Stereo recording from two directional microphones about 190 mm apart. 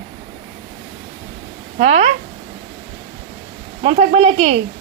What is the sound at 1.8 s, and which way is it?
Speech, 35° right (ahead or behind).